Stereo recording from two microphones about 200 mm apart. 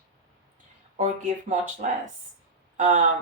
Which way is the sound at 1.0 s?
40° right (ahead or behind).